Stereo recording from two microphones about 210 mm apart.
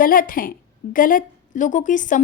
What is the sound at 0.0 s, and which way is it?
A woman's voice, 40° left (ahead or behind).